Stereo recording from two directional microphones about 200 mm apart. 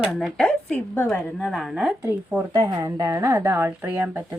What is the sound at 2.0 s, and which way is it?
A woman's voice, 10° right (ahead or behind).